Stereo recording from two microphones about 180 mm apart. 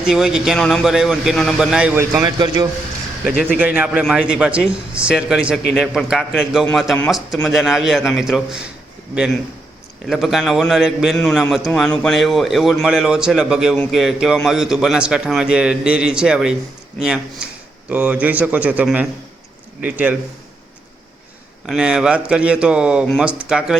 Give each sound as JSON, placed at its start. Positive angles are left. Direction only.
{"t": 0.1, "sound": "a man's voice", "side_deg": 0}
{"t": 2.2, "sound": "a man's voice", "side_deg": -25}
{"t": 3.8, "sound": "a man's voice", "side_deg": -5}
{"t": 21.7, "sound": "a man's voice", "side_deg": -5}